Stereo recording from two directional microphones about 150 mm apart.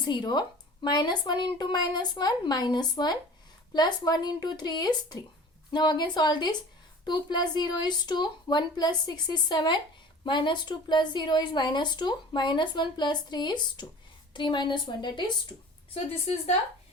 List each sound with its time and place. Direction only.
0.0 s a woman's voice: 30° left (ahead or behind)